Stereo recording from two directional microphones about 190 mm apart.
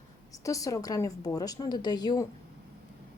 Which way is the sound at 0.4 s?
15° left (ahead or behind).